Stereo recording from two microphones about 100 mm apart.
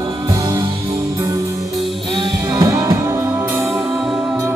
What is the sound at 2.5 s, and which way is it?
Music, 30° right (ahead or behind).